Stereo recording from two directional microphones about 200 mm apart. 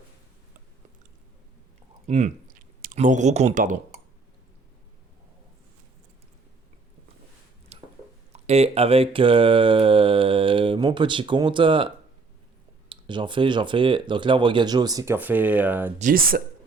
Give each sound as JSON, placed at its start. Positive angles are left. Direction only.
{"t": 2.0, "sound": "speech", "side_deg": -35}
{"t": 7.7, "sound": "a sound", "side_deg": -30}
{"t": 8.3, "sound": "mantra", "side_deg": -30}
{"t": 12.9, "sound": "mantra", "side_deg": -25}
{"t": 16.0, "sound": "speech", "side_deg": -45}